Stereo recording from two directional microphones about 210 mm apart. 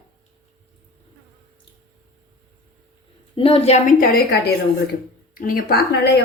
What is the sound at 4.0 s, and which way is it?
Speech, 45° left (ahead or behind).